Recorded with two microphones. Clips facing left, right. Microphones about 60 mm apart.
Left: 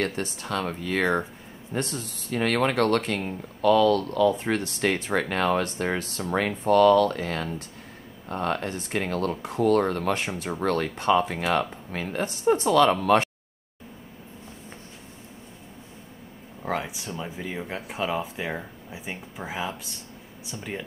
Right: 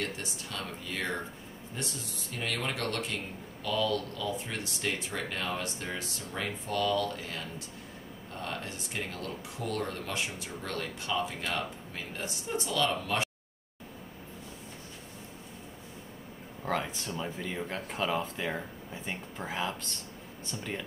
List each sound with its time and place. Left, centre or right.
0.0 s speech: left
1.7 s speech: left
16.6 s speech: centre